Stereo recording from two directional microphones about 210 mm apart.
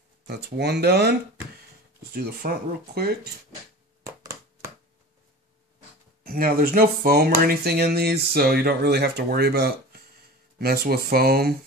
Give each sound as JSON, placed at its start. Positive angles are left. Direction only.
{"t": 0.3, "sound": "speech", "side_deg": -50}
{"t": 2.1, "sound": "speech", "side_deg": -50}
{"t": 4.0, "sound": "a sound", "side_deg": -15}
{"t": 6.2, "sound": "speech", "side_deg": -45}